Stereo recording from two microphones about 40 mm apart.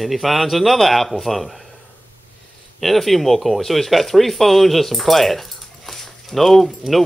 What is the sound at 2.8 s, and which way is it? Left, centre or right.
Speech, centre.